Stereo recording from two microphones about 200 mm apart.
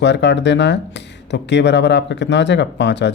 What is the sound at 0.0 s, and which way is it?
Speech, 60° left (ahead or behind).